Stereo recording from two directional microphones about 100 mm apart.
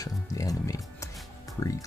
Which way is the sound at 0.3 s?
35° left (ahead or behind).